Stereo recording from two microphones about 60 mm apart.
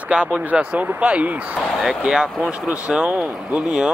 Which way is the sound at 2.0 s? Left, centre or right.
Centre.